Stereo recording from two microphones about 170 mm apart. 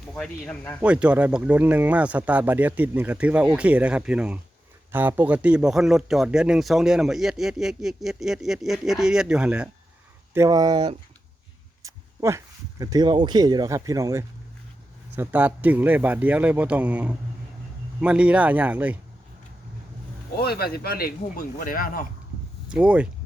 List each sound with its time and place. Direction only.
0.1 s a man's voice: 5° left (ahead or behind)
0.8 s a man's voice: 5° right (ahead or behind)
10.3 s speech: 20° right (ahead or behind)
11.8 s a sound: 20° right (ahead or behind)
12.8 s speech: 20° right (ahead or behind)
20.3 s speech: 65° left (ahead or behind)
22.7 s speech: 5° right (ahead or behind)